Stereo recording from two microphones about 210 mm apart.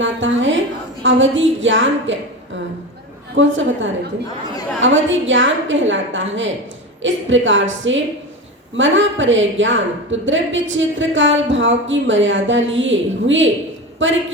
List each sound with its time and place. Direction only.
0.0 s a sound: 60° right (ahead or behind)
1.0 s a woman's voice: 65° right (ahead or behind)
3.3 s a woman's voice: 65° right (ahead or behind)